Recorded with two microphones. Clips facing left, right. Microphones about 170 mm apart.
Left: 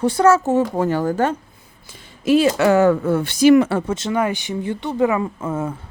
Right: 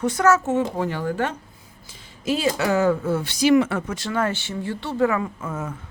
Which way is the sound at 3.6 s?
35° left (ahead or behind).